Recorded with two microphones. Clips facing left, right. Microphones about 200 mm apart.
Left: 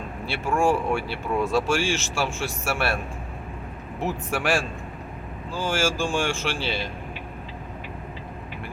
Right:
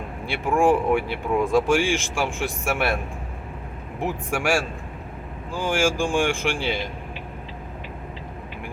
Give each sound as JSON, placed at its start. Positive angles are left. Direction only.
{"t": 0.3, "sound": "speech", "side_deg": -15}
{"t": 4.0, "sound": "speech", "side_deg": -10}